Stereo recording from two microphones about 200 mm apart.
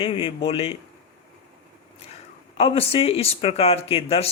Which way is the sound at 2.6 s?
30° left (ahead or behind).